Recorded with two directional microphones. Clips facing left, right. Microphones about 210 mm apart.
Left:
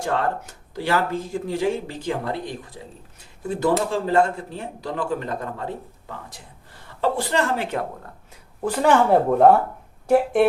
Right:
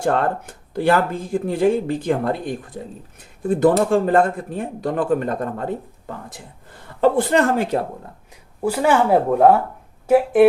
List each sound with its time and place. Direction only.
0.0 s speech: 55° right (ahead or behind)
7.0 s speech: 50° right (ahead or behind)
8.6 s speech: 10° right (ahead or behind)